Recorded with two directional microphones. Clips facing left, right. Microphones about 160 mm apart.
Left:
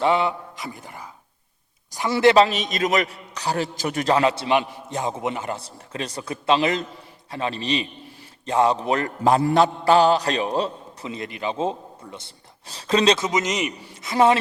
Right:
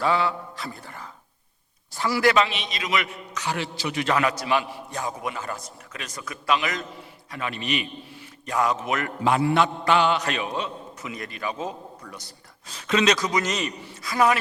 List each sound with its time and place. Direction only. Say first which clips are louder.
0.0 s a sound: left 3 dB; 20° left (ahead or behind)
2.0 s mantra: left 5 dB; 25° left (ahead or behind); by 4.1 s 45° left (ahead or behind)
4.1 s a man's voice: left 4 dB; 30° left (ahead or behind)
7.3 s mantra: left 4 dB; 30° left (ahead or behind)
12.6 s a man's voice: left 3 dB; 35° left (ahead or behind)